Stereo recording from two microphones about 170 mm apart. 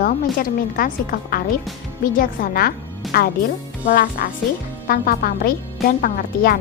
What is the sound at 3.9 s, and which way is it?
A woman's voice, 55° left (ahead or behind).